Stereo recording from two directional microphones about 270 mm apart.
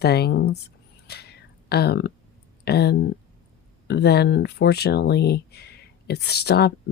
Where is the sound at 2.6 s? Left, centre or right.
Left.